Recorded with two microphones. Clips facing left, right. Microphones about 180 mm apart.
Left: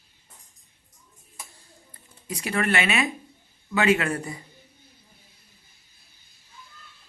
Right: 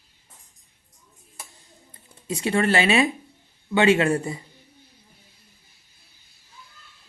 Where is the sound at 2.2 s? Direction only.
30° right (ahead or behind).